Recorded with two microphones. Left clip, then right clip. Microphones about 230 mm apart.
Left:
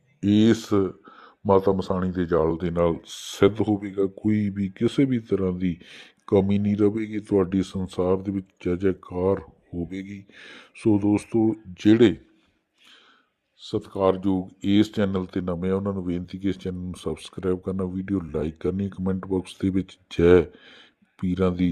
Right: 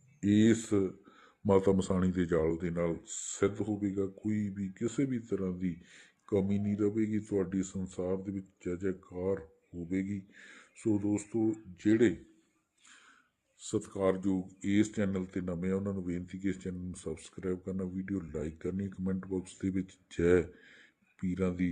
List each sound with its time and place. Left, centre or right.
0.3 s speech: centre
2.4 s speech: left
13.6 s speech: centre; by 21.6 s left